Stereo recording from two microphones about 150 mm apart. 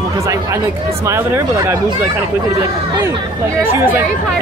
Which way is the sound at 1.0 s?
20° right (ahead or behind).